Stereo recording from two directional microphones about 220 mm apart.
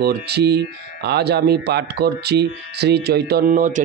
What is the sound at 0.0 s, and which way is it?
Speech, 45° right (ahead or behind).